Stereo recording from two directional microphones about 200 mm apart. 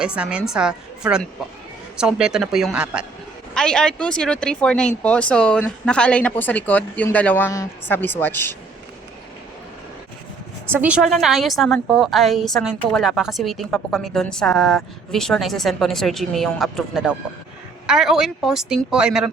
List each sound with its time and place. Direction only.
0.0 s a woman's voice: 5° right (ahead or behind); by 8.5 s 10° left (ahead or behind)
10.8 s a woman's voice: 5° right (ahead or behind)